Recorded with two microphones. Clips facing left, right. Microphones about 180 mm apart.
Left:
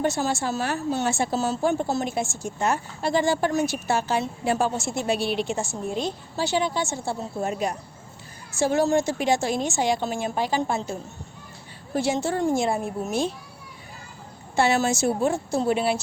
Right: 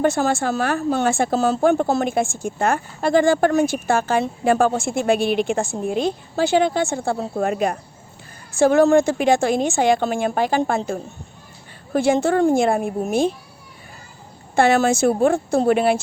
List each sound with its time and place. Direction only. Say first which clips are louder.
0.0 s a woman's voice: right 6 dB; 55° right (ahead or behind)
14.5 s a woman's voice: right 5 dB; 55° right (ahead or behind)